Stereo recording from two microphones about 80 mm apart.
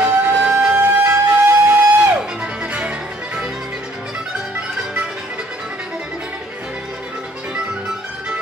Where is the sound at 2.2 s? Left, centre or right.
Centre.